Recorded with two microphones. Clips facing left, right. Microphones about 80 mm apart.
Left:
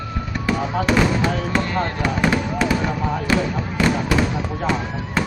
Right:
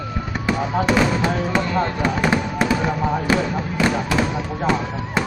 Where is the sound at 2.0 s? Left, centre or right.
Centre.